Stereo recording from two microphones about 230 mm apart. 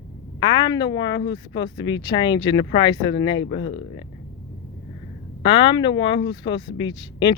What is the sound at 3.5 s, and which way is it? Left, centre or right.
Speech, left.